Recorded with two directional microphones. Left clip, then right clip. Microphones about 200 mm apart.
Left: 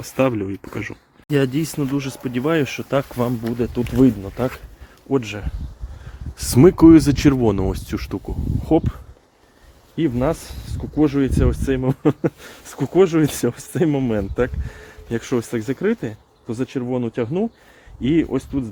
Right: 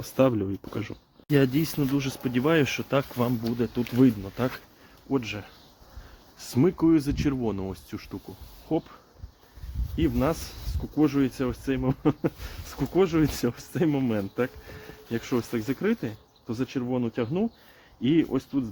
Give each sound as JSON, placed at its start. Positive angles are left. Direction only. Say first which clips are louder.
{"t": 0.0, "sound": "speech", "louder": "left 4 dB", "side_deg": 5}
{"t": 2.9, "sound": "speech", "louder": "left 9 dB", "side_deg": 15}
{"t": 5.1, "sound": "speech", "louder": "left 7 dB", "side_deg": 45}
{"t": 6.3, "sound": "speech", "louder": "left 11 dB", "side_deg": 55}
{"t": 9.9, "sound": "speech", "louder": "left 6 dB", "side_deg": 35}